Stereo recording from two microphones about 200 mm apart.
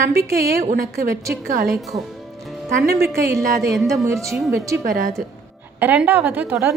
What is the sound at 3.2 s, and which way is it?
A woman's voice, 15° right (ahead or behind).